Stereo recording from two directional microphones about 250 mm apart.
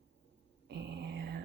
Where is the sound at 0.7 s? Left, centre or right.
Right.